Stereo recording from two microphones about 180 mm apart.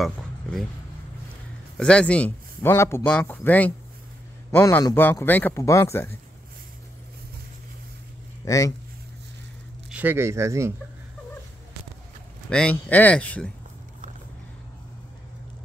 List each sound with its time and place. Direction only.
0.0 s a sound: centre (ahead or behind)
1.8 s speech: 5° left (ahead or behind)
8.5 s speech: 20° left (ahead or behind)
9.8 s speech: 10° right (ahead or behind)
12.4 s speech: 5° left (ahead or behind)